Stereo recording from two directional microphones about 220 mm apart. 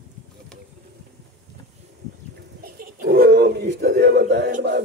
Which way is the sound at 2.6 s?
40° right (ahead or behind).